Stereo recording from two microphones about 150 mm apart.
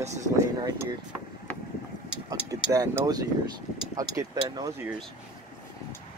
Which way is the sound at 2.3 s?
25° right (ahead or behind).